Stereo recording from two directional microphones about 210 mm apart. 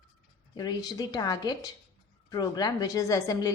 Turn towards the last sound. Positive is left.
turn(degrees=15)  # may be behind; listen again after turning